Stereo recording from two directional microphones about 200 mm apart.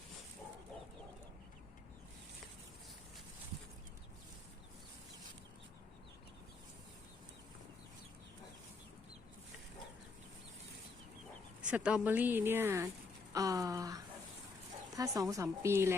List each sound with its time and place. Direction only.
11.7 s a woman's voice: 5° right (ahead or behind)
13.3 s a sound: 15° right (ahead or behind)
14.9 s a woman's voice: 15° right (ahead or behind)